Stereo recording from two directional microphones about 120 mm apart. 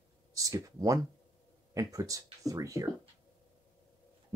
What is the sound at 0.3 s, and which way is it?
Speech, 30° right (ahead or behind).